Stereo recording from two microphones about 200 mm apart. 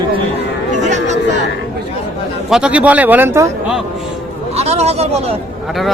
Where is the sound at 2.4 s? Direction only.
5° right (ahead or behind).